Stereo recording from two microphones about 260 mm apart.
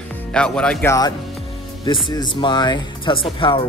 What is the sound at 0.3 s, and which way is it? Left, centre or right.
Speech, centre.